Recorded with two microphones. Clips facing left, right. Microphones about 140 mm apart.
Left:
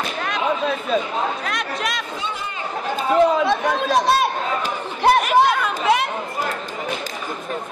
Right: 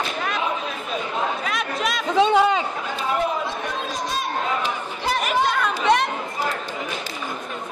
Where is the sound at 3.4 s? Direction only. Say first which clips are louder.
Left 8 dB; 75° left (ahead or behind).